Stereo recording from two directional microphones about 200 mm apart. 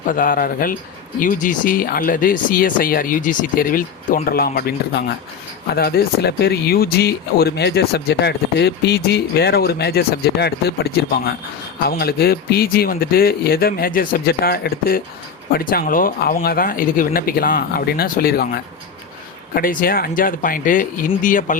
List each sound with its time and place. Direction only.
0.0 s speech: 45° left (ahead or behind)